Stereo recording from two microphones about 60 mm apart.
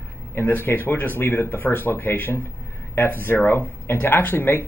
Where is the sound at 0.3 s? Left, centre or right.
Left.